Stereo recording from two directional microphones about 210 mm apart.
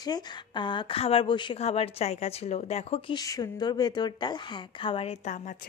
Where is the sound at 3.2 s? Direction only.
20° left (ahead or behind).